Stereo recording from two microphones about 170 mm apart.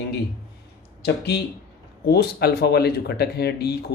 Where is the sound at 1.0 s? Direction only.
75° left (ahead or behind).